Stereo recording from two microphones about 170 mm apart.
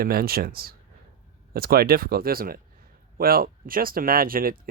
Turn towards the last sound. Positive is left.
turn(degrees=-60)  # may be behind; listen again after turning